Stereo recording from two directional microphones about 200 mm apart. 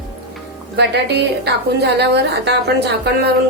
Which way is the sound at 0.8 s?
55° right (ahead or behind).